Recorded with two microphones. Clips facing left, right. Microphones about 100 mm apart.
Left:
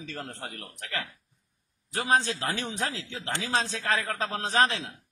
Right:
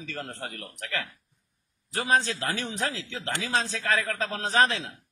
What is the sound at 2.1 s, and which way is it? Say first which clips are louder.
A man's voice: right 1 dB; 25° left (ahead or behind).